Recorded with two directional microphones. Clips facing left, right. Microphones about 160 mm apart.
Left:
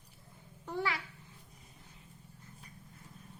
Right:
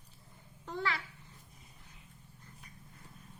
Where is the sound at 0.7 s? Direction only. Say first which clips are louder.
Left 1 dB; 15° left (ahead or behind).